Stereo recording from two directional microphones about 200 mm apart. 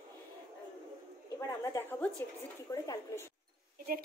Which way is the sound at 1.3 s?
15° left (ahead or behind).